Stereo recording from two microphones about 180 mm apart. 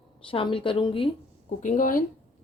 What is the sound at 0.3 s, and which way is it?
Speech, 30° left (ahead or behind).